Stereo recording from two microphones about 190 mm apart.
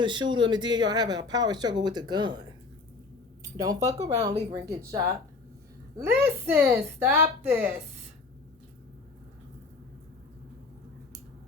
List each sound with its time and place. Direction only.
0.0 s speech: 25° right (ahead or behind)
3.6 s a woman's voice: 20° right (ahead or behind)